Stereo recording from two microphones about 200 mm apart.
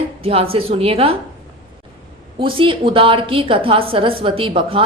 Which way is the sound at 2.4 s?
25° right (ahead or behind).